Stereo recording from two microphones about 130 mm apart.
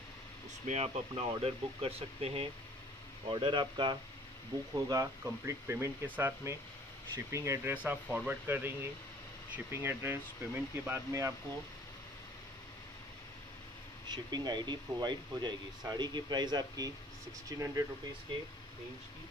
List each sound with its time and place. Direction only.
0.7 s speech: 55° right (ahead or behind); by 4.0 s 35° right (ahead or behind)
4.7 s speech: 25° right (ahead or behind)
7.7 s speech: 10° right (ahead or behind)
14.0 s speech: 30° right (ahead or behind)